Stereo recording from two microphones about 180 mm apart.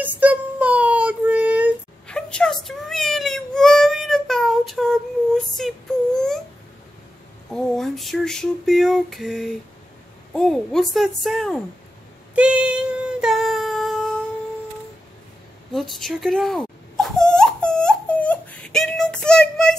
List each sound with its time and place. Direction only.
0.0 s child singing: 10° right (ahead or behind)
2.0 s a sound: 5° left (ahead or behind)
7.5 s a sound: centre (ahead or behind)
10.3 s a woman's voice: 5° left (ahead or behind)
12.4 s child singing: 5° right (ahead or behind)
15.7 s dog: centre (ahead or behind)